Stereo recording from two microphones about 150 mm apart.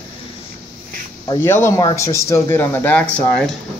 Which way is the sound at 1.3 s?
15° left (ahead or behind).